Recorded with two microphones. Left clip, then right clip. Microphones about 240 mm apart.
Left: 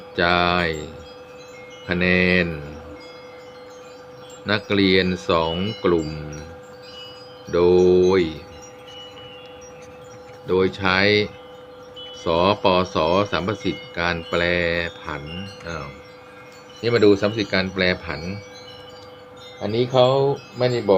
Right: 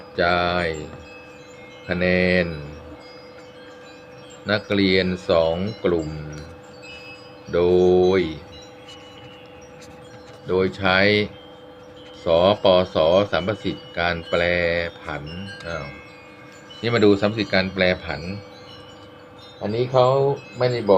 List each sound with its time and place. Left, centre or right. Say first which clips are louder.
0.2 s speech: left 1 dB; left
1.9 s speech: left 1 dB; centre
4.4 s speech: left 1 dB; centre
7.5 s speech: left 1 dB; centre
10.5 s speech: even; centre
16.8 s speech: left 1 dB; centre
19.6 s speech: left 1 dB; left